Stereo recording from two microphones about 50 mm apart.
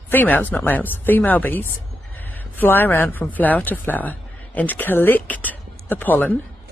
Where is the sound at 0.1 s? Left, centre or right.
Left.